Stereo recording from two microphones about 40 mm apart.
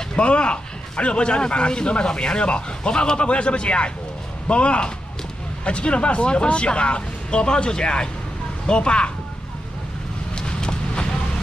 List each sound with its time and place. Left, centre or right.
0.1 s a man's voice: left
10.3 s vehicle: left